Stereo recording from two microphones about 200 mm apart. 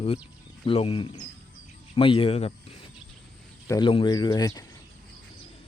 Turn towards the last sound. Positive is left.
turn(degrees=20)  # may be behind; listen again after turning